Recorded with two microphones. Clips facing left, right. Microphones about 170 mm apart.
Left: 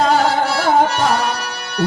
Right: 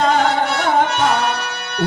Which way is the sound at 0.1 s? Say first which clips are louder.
Left 1 dB; 35° left (ahead or behind).